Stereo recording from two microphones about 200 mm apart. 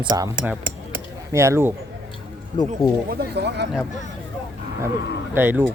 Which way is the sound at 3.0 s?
50° right (ahead or behind).